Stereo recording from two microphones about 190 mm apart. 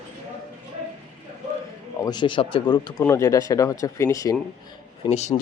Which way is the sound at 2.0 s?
25° left (ahead or behind).